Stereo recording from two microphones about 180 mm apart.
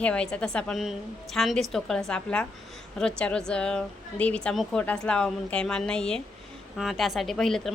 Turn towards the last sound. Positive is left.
turn(degrees=0)  # may be behind; listen again after turning